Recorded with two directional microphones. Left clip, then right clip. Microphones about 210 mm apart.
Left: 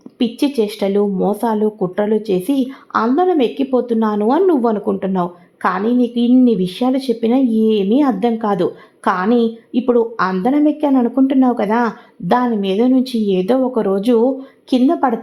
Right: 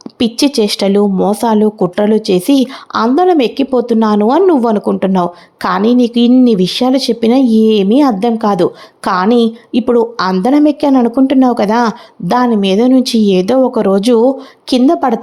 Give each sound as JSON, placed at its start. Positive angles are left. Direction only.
{"t": 0.2, "sound": "speech", "side_deg": -25}